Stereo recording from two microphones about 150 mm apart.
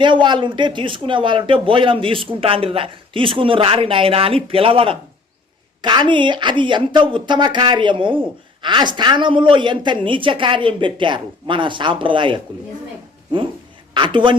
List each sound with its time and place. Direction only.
0.0 s speech: 30° right (ahead or behind)
13.9 s a woman's voice: 35° right (ahead or behind)